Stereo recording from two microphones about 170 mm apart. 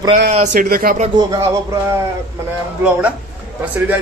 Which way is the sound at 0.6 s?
60° right (ahead or behind).